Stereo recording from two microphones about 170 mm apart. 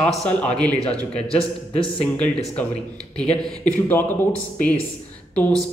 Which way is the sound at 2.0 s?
5° left (ahead or behind).